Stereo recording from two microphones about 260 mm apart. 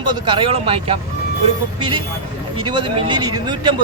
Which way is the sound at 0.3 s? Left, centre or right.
Centre.